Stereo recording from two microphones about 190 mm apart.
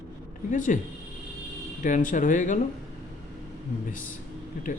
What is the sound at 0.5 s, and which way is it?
Speech, 45° left (ahead or behind).